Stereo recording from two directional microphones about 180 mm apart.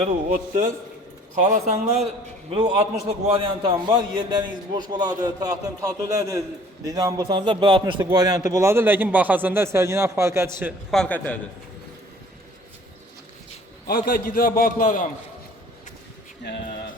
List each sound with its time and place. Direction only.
0.3 s a man's voice: 50° right (ahead or behind); by 10.8 s 15° right (ahead or behind)
10.9 s a man's voice: 5° left (ahead or behind)
13.8 s a man's voice: 55° left (ahead or behind)